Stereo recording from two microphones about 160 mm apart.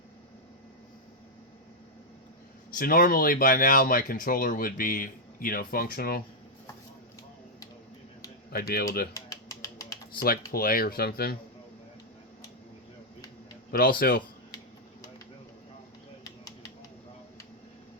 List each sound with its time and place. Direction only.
2.6 s speech: 60° left (ahead or behind)
8.4 s speech: 75° left (ahead or behind)
9.1 s a sound: 20° left (ahead or behind)
10.2 s speech: 65° left (ahead or behind)
13.7 s speech: 65° left (ahead or behind)